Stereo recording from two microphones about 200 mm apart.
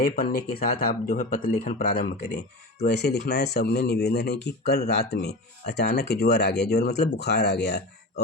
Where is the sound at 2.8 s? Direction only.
55° left (ahead or behind).